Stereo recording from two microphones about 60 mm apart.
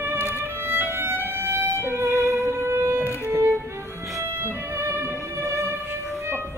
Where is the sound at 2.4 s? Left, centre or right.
Right.